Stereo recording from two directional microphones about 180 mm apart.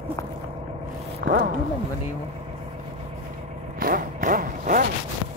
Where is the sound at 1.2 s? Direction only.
60° right (ahead or behind).